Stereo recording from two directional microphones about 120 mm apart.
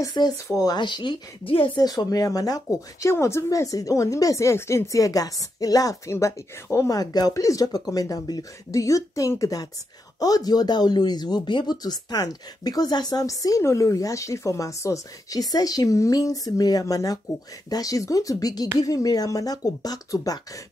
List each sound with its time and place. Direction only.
0.0 s speech: 35° left (ahead or behind)
1.8 s speech: 30° left (ahead or behind)